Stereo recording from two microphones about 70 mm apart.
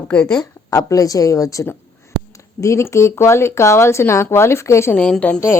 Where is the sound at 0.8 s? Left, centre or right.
Left.